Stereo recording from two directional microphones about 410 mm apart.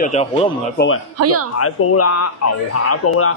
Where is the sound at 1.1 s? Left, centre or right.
Right.